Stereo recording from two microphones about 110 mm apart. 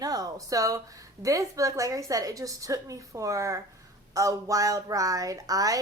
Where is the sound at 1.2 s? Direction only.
30° right (ahead or behind).